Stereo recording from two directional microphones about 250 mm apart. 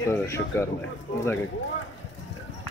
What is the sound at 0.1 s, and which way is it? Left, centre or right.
Speech, centre.